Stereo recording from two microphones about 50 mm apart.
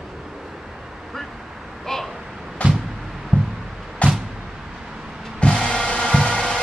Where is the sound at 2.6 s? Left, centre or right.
Left.